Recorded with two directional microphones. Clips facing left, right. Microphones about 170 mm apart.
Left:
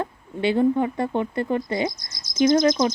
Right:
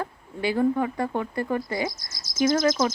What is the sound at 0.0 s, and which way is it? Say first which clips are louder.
Speech: left 4 dB; 25° left (ahead or behind).